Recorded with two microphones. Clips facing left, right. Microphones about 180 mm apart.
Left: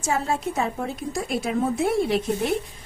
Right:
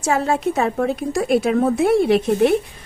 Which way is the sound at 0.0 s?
70° right (ahead or behind).